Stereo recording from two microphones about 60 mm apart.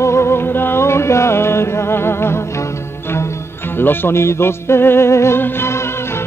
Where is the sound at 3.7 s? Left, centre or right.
Left.